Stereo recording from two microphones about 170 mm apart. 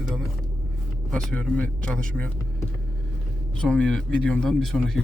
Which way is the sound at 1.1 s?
5° left (ahead or behind).